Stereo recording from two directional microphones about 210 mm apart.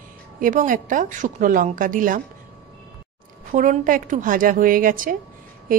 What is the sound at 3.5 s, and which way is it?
A woman's voice, 40° right (ahead or behind).